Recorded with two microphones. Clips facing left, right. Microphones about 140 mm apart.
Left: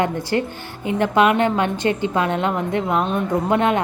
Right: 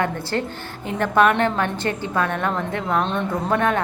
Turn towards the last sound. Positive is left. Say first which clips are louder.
# left 2 dB
turn(degrees=20)  # may be behind; listen again after turning